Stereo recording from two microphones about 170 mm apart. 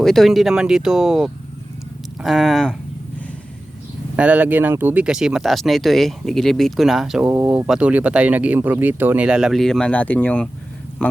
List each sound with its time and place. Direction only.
0.0 s speech: centre (ahead or behind)
4.2 s speech: 10° right (ahead or behind); by 10.5 s 10° left (ahead or behind)